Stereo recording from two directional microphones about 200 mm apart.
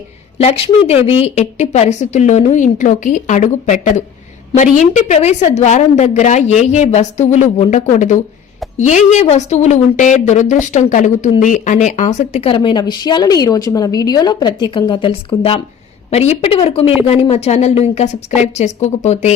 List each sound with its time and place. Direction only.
0.3 s a woman's voice: 30° left (ahead or behind)